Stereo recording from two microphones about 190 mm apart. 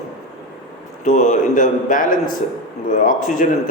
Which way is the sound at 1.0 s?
40° left (ahead or behind).